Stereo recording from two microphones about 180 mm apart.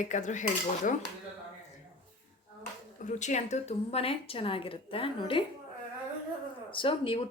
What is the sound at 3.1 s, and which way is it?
A woman's voice, 40° left (ahead or behind).